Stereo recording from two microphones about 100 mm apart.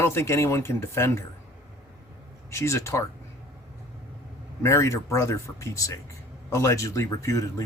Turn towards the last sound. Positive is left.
turn(degrees=30)  # may be behind; listen again after turning